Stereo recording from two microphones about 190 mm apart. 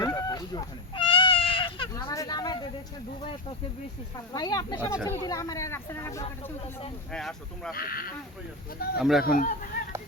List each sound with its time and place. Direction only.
0.0 s a sound: 20° left (ahead or behind)
4.3 s speech: 20° left (ahead or behind)
7.1 s speech: 5° left (ahead or behind)
7.7 s speech: 50° left (ahead or behind)
9.0 s speech: centre (ahead or behind)
9.2 s speech: 45° left (ahead or behind)